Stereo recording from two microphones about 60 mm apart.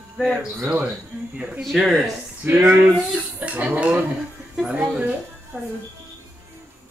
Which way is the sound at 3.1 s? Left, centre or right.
Right.